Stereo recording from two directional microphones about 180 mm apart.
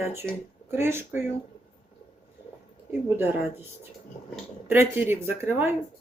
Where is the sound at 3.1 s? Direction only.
15° right (ahead or behind).